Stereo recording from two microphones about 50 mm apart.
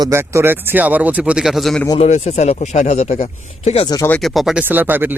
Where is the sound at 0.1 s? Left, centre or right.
Right.